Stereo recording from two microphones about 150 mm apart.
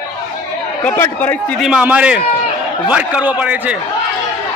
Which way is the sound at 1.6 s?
5° right (ahead or behind).